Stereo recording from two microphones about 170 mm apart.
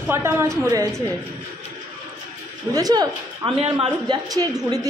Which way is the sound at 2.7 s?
20° right (ahead or behind).